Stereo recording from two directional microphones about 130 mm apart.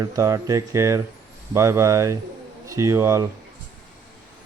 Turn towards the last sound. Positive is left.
turn(degrees=-25)  # may be behind; listen again after turning